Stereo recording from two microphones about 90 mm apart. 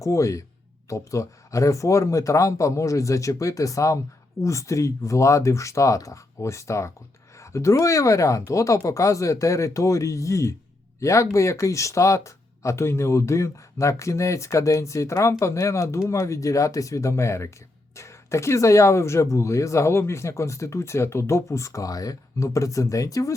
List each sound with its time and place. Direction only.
0.0 s speech: 35° left (ahead or behind)